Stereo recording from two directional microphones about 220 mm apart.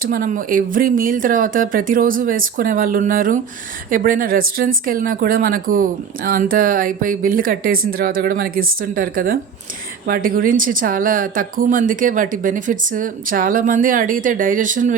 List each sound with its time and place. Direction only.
0.0 s speech: 40° right (ahead or behind)